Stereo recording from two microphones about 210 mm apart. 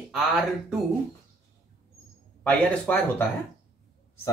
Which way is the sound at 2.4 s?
5° left (ahead or behind).